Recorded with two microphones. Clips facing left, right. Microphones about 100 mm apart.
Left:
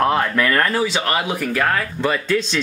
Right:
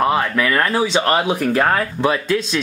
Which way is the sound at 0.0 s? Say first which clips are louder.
Even; 5° right (ahead or behind).